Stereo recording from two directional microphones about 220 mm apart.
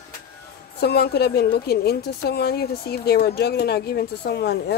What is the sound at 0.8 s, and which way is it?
A woman's voice, 45° left (ahead or behind).